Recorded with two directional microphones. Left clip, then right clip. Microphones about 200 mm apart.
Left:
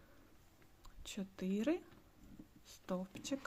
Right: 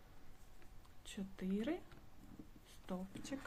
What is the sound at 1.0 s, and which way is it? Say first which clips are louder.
Speech: left 3 dB; 25° left (ahead or behind).